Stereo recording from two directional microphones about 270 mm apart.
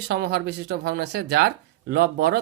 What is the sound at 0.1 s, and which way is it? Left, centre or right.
Speech, right.